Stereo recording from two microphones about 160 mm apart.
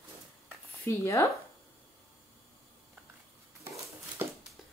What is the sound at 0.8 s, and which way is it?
Speech, 20° left (ahead or behind).